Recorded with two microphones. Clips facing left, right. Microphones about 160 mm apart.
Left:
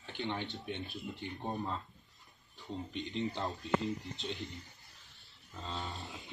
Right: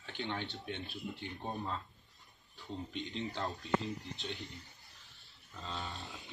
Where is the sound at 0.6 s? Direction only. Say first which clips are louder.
Left 2 dB; 15° left (ahead or behind).